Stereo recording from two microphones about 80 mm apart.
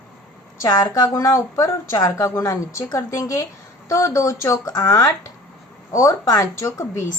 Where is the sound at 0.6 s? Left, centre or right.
Left.